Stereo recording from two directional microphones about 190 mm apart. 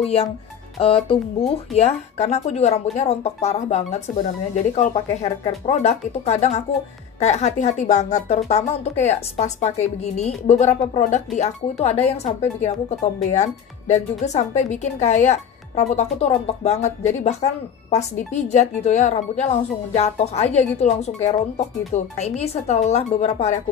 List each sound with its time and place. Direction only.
0.7 s a woman's voice: 30° left (ahead or behind)